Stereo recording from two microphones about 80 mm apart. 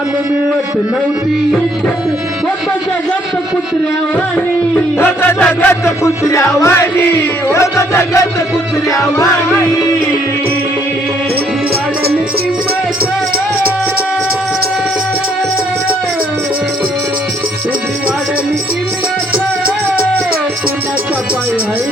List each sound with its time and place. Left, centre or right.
4.9 s music: left
6.0 s music: left